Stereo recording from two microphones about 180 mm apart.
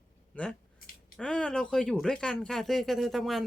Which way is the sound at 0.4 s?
5° left (ahead or behind).